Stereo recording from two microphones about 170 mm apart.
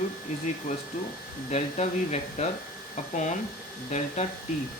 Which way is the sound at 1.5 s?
40° left (ahead or behind).